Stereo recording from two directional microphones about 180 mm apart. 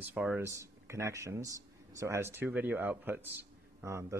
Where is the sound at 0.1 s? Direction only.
10° right (ahead or behind).